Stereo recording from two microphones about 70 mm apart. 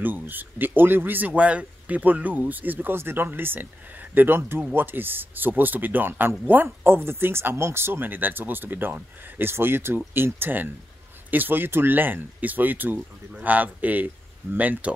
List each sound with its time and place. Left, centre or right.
0.0 s speech: right